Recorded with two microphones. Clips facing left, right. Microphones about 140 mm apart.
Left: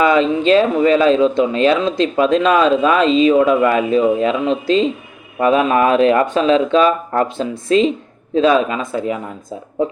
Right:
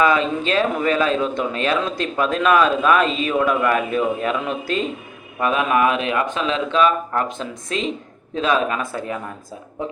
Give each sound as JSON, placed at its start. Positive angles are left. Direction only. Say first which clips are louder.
{"t": 0.0, "sound": "speech", "louder": "left 5 dB", "side_deg": 30}